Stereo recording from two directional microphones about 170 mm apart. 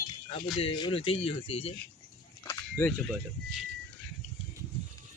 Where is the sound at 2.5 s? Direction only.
15° left (ahead or behind).